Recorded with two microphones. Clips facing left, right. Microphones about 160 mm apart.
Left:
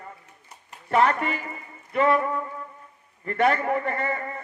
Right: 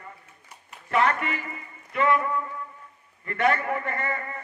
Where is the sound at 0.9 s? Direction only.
40° left (ahead or behind).